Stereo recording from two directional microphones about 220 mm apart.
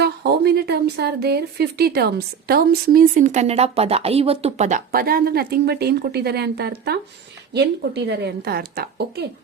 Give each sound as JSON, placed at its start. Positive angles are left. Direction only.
{"t": 0.0, "sound": "a woman's voice", "side_deg": -45}